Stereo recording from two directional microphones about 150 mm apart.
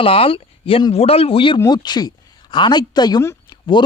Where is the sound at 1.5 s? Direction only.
25° left (ahead or behind).